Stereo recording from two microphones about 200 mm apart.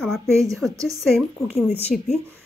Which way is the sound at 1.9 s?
40° left (ahead or behind).